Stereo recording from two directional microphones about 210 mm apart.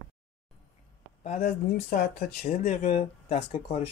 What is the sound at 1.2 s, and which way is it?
Speech, 35° left (ahead or behind).